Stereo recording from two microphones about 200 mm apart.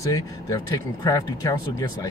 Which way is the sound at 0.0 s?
15° left (ahead or behind).